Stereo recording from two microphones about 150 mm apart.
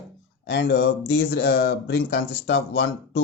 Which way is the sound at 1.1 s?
90° left.